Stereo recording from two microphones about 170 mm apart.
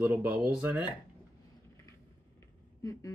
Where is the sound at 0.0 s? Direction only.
5° right (ahead or behind).